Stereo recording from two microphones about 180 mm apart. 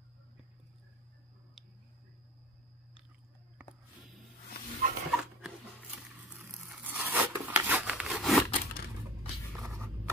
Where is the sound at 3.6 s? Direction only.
5° right (ahead or behind).